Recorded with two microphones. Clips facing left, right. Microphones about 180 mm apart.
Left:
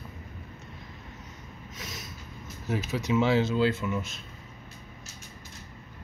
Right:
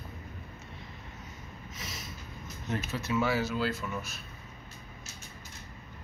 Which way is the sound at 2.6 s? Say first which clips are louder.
Left 5 dB; 15° left (ahead or behind).